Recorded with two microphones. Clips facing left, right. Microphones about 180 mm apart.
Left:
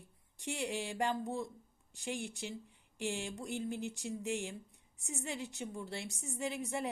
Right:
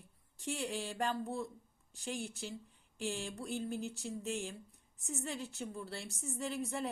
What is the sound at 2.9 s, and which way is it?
A woman's voice, 15° left (ahead or behind).